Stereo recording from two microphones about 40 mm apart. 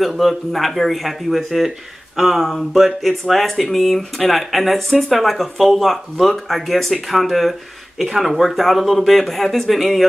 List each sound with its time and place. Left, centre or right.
0.0 s speech: centre